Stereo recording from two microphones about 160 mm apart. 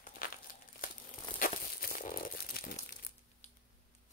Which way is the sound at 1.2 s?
50° left (ahead or behind).